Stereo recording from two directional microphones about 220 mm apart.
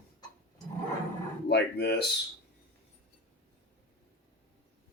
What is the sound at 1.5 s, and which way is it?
Speech, 50° left (ahead or behind).